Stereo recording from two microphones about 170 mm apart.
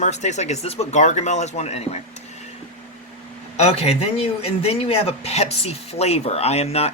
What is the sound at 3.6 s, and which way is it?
Speech, 40° left (ahead or behind).